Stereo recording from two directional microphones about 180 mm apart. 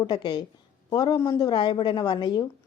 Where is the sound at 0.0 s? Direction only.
25° left (ahead or behind).